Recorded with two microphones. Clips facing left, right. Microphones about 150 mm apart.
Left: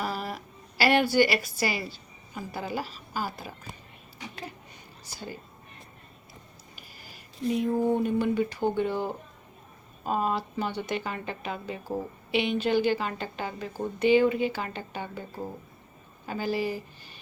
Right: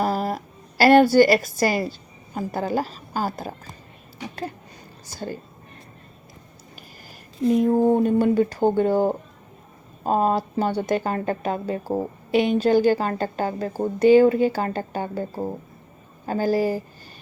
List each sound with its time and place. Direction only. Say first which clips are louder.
0.0 s a sound: right 9 dB; 40° right (ahead or behind)
1.5 s a woman's voice: right 8 dB; 45° right (ahead or behind)
5.0 s speech: right 8 dB; 45° right (ahead or behind)
6.7 s speech: right 5 dB; 45° right (ahead or behind)